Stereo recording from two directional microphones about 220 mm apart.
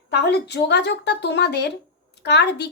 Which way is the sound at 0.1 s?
50° left (ahead or behind).